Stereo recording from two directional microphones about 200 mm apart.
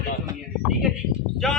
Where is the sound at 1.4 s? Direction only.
Centre (ahead or behind).